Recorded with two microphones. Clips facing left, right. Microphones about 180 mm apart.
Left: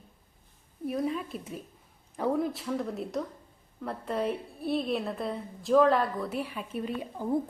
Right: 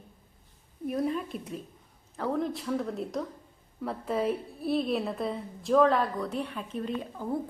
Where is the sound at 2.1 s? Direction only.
10° left (ahead or behind).